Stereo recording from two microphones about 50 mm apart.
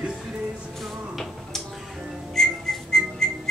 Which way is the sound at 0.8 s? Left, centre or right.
Centre.